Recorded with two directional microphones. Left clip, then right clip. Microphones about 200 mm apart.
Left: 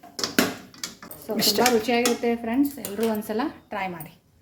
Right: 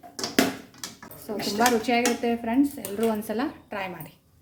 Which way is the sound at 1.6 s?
5° right (ahead or behind).